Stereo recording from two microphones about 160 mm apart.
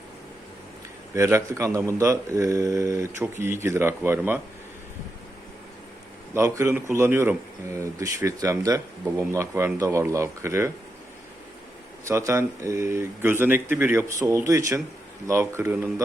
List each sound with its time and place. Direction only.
1.1 s speech: 15° right (ahead or behind)
6.3 s speech: 20° right (ahead or behind)
12.0 s speech: 20° right (ahead or behind)